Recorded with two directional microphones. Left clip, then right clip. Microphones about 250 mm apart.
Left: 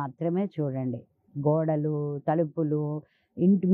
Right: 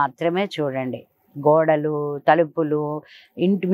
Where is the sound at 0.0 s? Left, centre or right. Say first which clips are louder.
Right 9 dB; centre.